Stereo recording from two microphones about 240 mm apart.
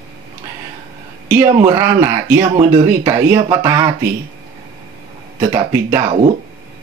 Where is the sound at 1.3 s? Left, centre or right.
Centre.